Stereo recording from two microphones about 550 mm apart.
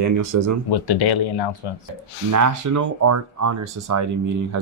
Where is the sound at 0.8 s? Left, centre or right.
Left.